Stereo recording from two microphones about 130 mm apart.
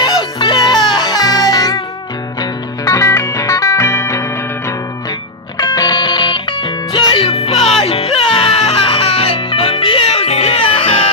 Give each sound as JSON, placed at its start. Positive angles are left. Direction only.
{"t": 0.0, "sound": "music", "side_deg": 35}
{"t": 2.8, "sound": "music", "side_deg": 25}